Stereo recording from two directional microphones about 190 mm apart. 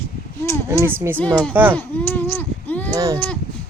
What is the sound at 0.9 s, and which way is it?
Speech, 10° right (ahead or behind).